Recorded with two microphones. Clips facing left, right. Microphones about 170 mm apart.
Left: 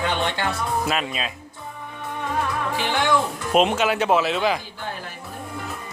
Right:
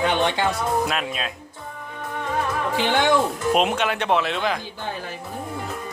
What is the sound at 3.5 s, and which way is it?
Speech, centre (ahead or behind).